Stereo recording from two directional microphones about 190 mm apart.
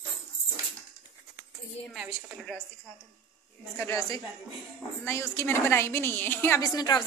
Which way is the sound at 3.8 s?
15° left (ahead or behind).